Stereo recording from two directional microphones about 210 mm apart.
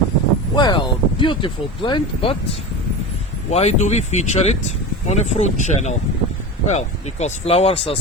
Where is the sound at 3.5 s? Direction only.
30° left (ahead or behind).